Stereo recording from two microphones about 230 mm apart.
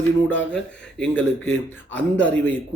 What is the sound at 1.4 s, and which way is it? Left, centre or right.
Speech, left.